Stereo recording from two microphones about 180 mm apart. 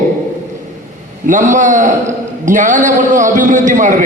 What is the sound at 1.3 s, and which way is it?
A man's voice, 45° right (ahead or behind).